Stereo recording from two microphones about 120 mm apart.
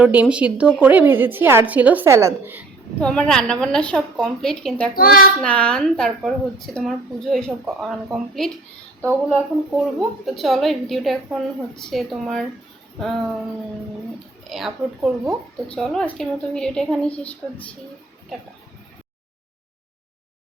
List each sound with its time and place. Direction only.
0.0 s a woman's voice: 10° right (ahead or behind)
3.0 s a woman's voice: 5° left (ahead or behind)
9.0 s speech: 20° right (ahead or behind)
9.7 s a woman's voice: centre (ahead or behind)
14.5 s a woman's voice: centre (ahead or behind)